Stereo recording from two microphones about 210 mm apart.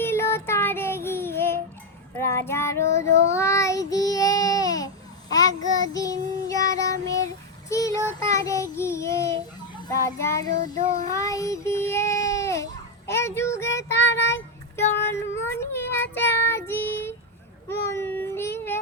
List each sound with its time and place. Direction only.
0.0 s child singing: 10° left (ahead or behind)
11.2 s child singing: 15° left (ahead or behind)
13.1 s speech: 10° left (ahead or behind)
14.2 s child singing: 10° left (ahead or behind)
17.7 s a sound: 10° left (ahead or behind)